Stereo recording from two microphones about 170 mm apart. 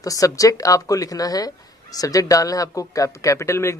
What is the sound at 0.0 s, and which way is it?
Speech, 20° left (ahead or behind).